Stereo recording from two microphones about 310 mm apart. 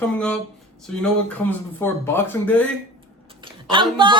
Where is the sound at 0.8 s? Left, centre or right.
Centre.